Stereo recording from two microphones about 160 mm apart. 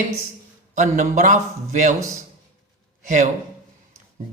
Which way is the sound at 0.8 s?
50° right (ahead or behind).